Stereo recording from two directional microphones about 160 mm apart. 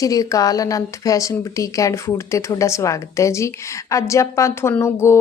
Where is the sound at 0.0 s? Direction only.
20° left (ahead or behind).